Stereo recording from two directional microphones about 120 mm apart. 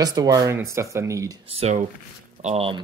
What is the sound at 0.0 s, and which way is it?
Speech, 35° right (ahead or behind).